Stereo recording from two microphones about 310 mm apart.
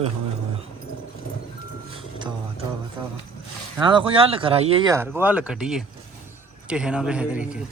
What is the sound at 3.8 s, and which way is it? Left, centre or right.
A man's voice, centre.